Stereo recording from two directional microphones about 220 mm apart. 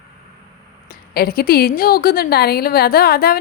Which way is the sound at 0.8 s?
45° left (ahead or behind).